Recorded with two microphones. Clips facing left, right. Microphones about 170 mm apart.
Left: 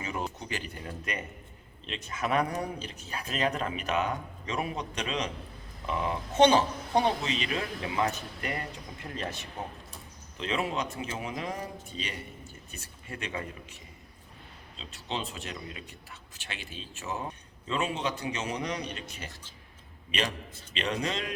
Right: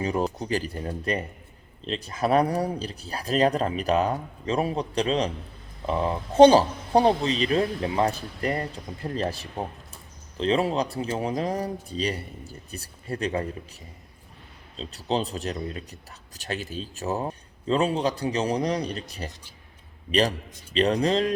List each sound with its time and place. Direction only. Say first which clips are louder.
0.0 s speech: right 9 dB; 35° right (ahead or behind)
14.8 s a man's voice: right 9 dB; 35° right (ahead or behind)